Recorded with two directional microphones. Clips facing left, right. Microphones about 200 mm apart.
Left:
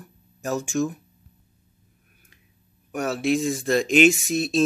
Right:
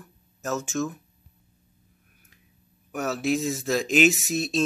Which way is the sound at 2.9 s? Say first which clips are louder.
Left 3 dB; centre (ahead or behind).